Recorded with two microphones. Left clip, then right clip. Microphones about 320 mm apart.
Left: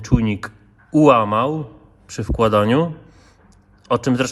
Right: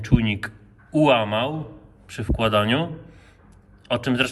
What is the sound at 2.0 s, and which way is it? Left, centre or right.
Speech, centre.